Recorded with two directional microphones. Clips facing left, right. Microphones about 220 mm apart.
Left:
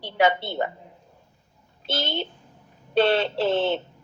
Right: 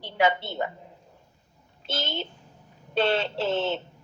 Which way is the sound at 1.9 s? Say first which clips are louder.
Left 3 dB; 65° left (ahead or behind).